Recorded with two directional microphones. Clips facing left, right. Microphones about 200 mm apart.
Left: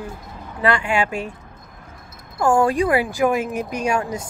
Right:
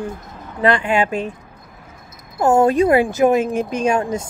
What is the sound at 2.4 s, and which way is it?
Speech, 20° right (ahead or behind).